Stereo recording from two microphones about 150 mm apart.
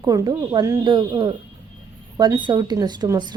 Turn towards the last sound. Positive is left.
turn(degrees=-25)  # may be behind; listen again after turning